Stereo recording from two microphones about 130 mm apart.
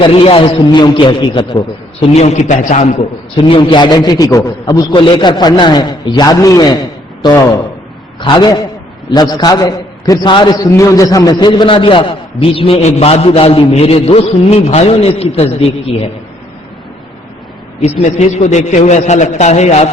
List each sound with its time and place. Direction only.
0.0 s a man's voice: 45° left (ahead or behind); by 2.8 s 70° left (ahead or behind)
3.3 s a man's voice: 40° left (ahead or behind)
4.9 s a man's voice: 35° left (ahead or behind)
8.2 s a man's voice: 35° left (ahead or behind)
10.7 s a man's voice: 25° left (ahead or behind); by 15.4 s 50° left (ahead or behind)
17.7 s a man's voice: 60° left (ahead or behind)